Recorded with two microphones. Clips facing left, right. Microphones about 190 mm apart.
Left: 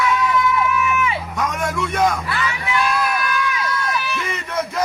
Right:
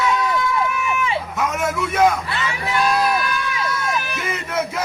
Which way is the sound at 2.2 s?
25° right (ahead or behind).